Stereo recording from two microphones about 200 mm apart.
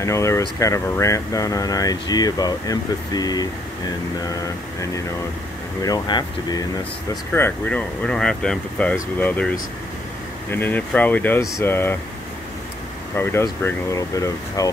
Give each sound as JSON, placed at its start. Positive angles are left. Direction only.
{"t": 0.0, "sound": "speech", "side_deg": 15}
{"t": 5.8, "sound": "speech", "side_deg": 20}
{"t": 7.3, "sound": "speech", "side_deg": 10}
{"t": 10.5, "sound": "speech", "side_deg": 10}
{"t": 13.1, "sound": "speech", "side_deg": 10}